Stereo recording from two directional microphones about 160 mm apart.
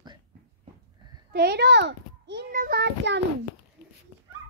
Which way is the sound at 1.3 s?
90° right.